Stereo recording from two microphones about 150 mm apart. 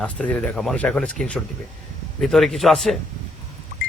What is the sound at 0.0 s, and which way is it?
Speech, 10° left (ahead or behind).